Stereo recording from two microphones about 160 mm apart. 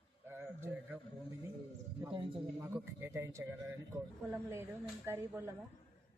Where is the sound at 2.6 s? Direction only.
15° right (ahead or behind).